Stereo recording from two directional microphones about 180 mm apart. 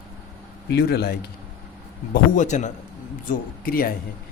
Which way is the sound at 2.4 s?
40° left (ahead or behind).